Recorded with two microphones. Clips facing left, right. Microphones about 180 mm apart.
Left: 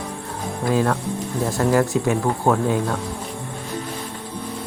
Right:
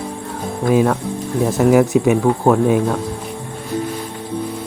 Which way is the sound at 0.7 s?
15° right (ahead or behind).